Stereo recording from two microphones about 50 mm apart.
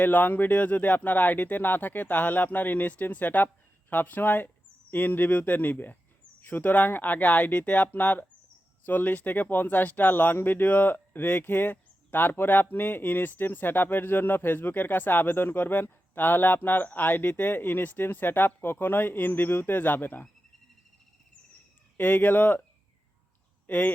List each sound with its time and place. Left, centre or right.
0.0 s speech: left
21.9 s speech: left
23.6 s speech: left